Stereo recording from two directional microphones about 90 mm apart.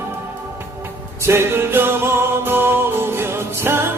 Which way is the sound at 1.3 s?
30° right (ahead or behind).